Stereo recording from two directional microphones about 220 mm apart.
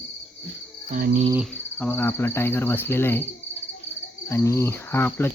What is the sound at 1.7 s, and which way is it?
Speech, 10° left (ahead or behind).